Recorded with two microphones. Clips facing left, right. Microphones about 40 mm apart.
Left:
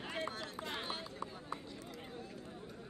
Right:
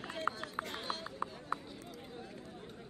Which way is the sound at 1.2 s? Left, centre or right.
Right.